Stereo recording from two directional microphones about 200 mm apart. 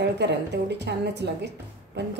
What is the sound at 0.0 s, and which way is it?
A woman's voice, 60° right (ahead or behind).